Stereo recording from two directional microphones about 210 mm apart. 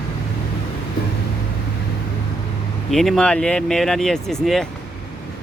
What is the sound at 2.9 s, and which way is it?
Speech, centre (ahead or behind).